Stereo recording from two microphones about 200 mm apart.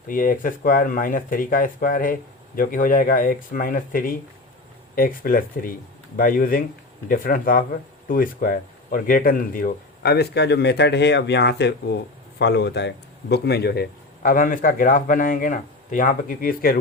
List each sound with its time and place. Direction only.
0.1 s speech: 45° left (ahead or behind)